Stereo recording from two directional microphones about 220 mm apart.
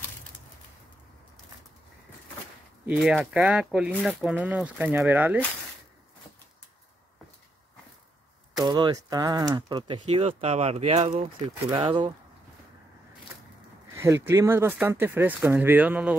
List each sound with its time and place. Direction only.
2.9 s speech: centre (ahead or behind)
8.5 s speech: 20° right (ahead or behind)
13.9 s speech: 10° right (ahead or behind)